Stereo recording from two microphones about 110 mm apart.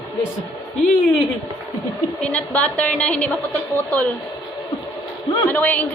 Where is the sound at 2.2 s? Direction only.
10° left (ahead or behind).